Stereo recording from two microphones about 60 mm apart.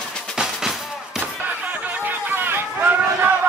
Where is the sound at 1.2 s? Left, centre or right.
Right.